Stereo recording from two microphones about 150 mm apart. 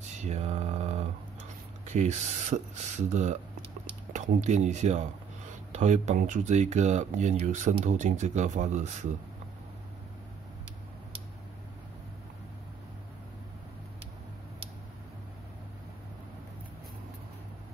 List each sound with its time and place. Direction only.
0.0 s mantra: 50° right (ahead or behind)
1.9 s speech: 50° right (ahead or behind)